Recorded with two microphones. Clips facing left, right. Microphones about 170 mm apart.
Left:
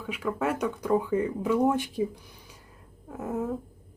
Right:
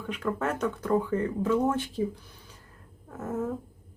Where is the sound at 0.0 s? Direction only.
5° left (ahead or behind).